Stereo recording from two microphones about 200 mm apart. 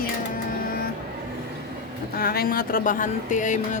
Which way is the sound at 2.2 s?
50° left (ahead or behind).